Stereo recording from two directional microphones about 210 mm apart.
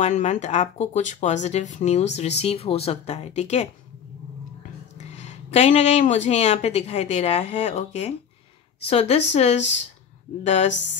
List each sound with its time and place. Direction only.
0.0 s speech: 35° left (ahead or behind)
4.9 s a woman's voice: 35° left (ahead or behind)
10.7 s speech: 60° left (ahead or behind)